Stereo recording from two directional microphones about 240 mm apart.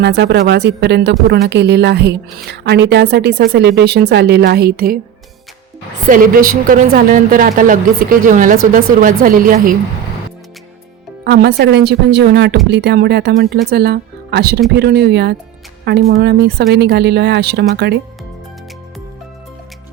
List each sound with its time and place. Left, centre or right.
0.0 s a woman's voice: right
6.1 s a woman's voice: right
11.2 s a woman's voice: right